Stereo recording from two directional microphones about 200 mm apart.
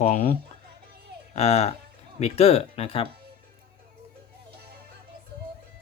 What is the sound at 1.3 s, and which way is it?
Speech, 30° left (ahead or behind).